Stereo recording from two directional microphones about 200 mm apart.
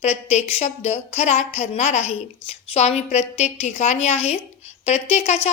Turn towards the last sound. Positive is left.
turn(degrees=30)  # may be behind; listen again after turning